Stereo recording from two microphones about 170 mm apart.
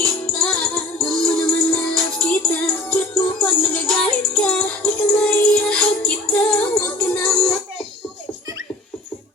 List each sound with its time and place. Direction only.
0.0 s music: 5° left (ahead or behind)